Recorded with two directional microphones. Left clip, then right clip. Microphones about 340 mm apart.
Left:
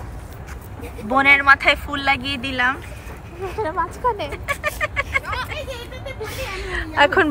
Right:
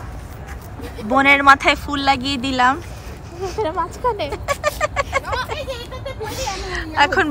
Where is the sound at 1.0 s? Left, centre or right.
Centre.